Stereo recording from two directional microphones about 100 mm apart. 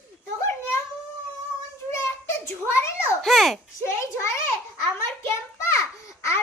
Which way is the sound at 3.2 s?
Centre (ahead or behind).